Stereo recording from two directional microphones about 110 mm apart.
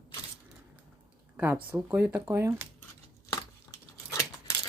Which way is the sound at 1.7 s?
15° right (ahead or behind).